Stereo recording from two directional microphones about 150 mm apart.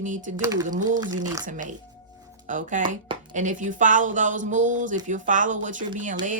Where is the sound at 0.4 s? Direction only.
20° right (ahead or behind).